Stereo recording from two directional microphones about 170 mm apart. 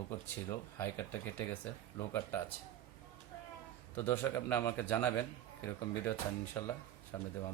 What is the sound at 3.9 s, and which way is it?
Speech, 10° left (ahead or behind).